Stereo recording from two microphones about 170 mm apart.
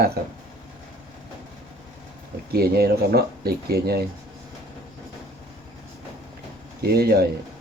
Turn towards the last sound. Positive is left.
turn(degrees=-65)  # may be behind; listen again after turning